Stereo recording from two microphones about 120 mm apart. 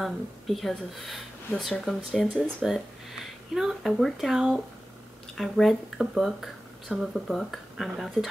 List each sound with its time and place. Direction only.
0.0 s speech: centre (ahead or behind)